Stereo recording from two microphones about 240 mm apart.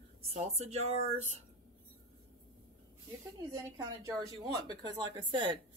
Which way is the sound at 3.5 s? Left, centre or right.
Centre.